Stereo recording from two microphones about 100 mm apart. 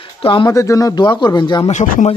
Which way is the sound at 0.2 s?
60° left (ahead or behind).